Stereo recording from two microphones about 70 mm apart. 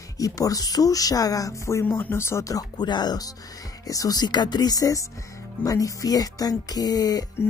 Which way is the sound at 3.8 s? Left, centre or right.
Left.